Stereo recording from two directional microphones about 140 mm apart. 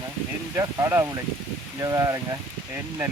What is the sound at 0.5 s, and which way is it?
Speech, 20° right (ahead or behind).